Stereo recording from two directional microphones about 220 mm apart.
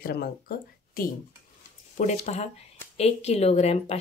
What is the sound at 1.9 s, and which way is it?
Speech, 35° left (ahead or behind).